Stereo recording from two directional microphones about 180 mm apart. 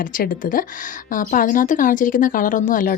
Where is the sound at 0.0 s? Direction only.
50° left (ahead or behind).